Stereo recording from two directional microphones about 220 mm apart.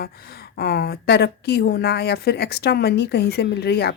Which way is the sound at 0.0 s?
45° left (ahead or behind).